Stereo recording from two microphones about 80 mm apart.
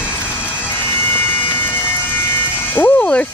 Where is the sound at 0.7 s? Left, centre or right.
Left.